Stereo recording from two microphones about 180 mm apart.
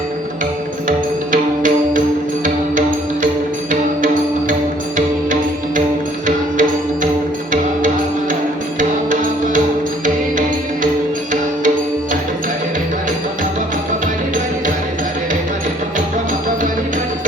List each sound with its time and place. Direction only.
0.9 s music: 45° right (ahead or behind)
8.8 s music: 45° right (ahead or behind)